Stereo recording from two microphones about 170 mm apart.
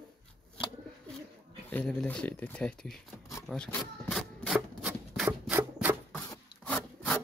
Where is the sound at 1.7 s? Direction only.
10° left (ahead or behind).